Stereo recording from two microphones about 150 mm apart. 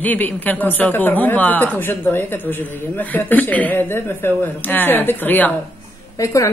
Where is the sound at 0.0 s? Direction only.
10° left (ahead or behind).